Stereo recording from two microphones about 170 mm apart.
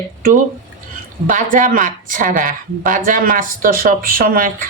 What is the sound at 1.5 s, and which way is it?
A woman's voice, 50° right (ahead or behind).